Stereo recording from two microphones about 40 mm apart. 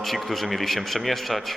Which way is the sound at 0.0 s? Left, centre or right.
Centre.